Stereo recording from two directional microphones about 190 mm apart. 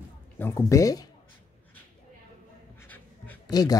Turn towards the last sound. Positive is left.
turn(degrees=20)  # may be behind; listen again after turning